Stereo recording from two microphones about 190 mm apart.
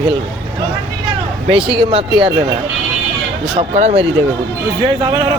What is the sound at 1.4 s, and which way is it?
Speech, 30° right (ahead or behind).